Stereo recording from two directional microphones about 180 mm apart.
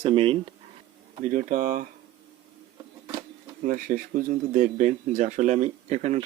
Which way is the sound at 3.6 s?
50° right (ahead or behind).